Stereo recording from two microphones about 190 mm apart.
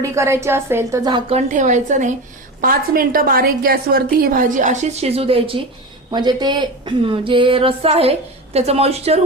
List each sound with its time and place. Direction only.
0.0 s a woman's voice: 15° right (ahead or behind); by 9.2 s 35° right (ahead or behind)